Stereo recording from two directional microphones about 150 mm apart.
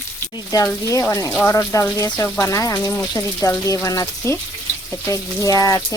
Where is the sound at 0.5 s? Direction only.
25° left (ahead or behind).